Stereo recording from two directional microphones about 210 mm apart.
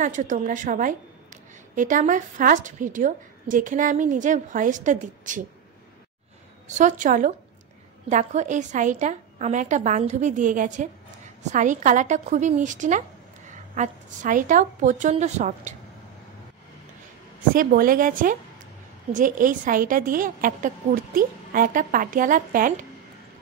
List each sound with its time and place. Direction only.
0.0 s a woman's voice: 35° right (ahead or behind)
6.8 s a woman's voice: 35° right (ahead or behind)
17.6 s a woman's voice: 40° right (ahead or behind)